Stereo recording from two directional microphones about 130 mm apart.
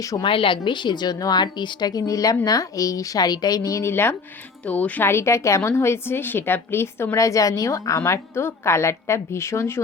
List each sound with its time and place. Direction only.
0.0 s a woman's voice: 25° left (ahead or behind)
0.3 s a woman's voice: 40° left (ahead or behind); by 9.8 s 20° left (ahead or behind)